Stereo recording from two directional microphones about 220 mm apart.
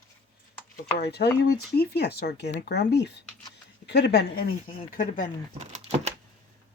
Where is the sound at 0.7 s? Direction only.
45° left (ahead or behind).